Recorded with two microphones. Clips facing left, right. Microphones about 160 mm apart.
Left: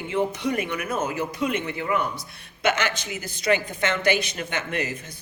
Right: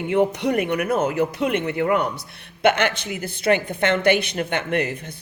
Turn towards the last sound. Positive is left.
turn(degrees=-60)  # may be behind; listen again after turning